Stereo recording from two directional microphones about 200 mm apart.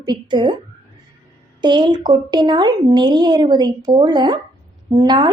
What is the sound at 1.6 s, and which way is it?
Speech, 25° right (ahead or behind).